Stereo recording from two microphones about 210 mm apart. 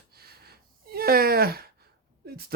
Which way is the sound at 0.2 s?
50° right (ahead or behind).